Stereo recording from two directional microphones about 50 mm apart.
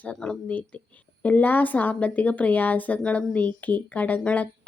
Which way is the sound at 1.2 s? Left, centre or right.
Left.